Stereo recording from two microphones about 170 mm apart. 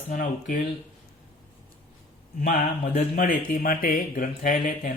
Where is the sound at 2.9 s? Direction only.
50° left (ahead or behind).